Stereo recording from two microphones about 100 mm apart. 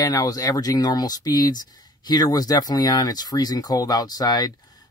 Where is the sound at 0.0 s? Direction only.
40° left (ahead or behind).